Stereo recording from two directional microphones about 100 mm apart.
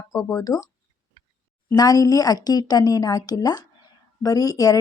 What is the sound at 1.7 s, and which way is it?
A woman's voice, 40° left (ahead or behind).